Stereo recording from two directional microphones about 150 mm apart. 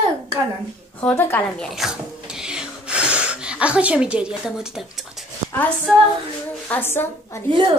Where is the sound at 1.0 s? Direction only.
10° left (ahead or behind).